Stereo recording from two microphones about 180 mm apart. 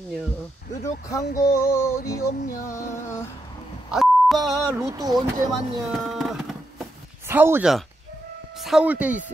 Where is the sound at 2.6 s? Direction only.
15° left (ahead or behind).